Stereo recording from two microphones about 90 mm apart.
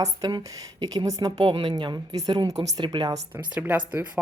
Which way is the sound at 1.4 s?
70° right (ahead or behind).